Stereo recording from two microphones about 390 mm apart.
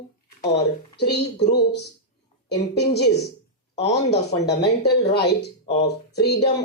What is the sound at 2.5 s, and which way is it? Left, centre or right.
Speech, left.